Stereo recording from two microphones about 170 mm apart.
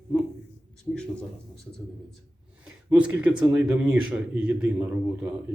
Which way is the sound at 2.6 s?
5° right (ahead or behind).